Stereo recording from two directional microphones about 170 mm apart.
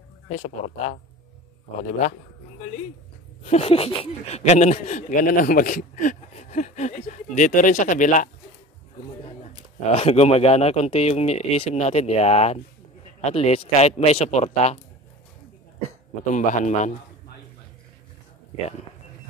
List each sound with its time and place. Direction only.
0.3 s speech: 45° left (ahead or behind)
3.4 s speech: 35° left (ahead or behind)
9.9 s speech: 35° left (ahead or behind)
16.3 s speech: 45° left (ahead or behind)